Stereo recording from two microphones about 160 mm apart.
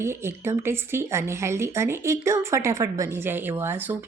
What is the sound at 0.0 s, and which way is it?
Speech, 15° right (ahead or behind).